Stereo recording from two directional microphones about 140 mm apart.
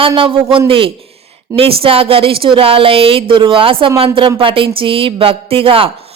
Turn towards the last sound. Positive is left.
turn(degrees=-40)  # may be behind; listen again after turning